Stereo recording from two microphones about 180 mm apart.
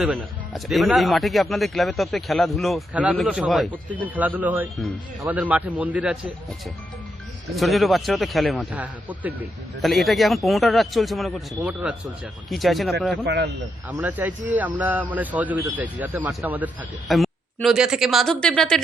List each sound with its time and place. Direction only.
0.0 s a man's voice: centre (ahead or behind)
7.5 s speech: centre (ahead or behind)
13.2 s a man's voice: 65° right (ahead or behind)
13.9 s a man's voice: 10° right (ahead or behind)